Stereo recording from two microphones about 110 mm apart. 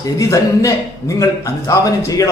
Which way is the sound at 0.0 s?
30° left (ahead or behind).